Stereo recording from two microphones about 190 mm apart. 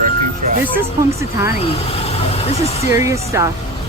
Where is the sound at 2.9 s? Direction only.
15° right (ahead or behind).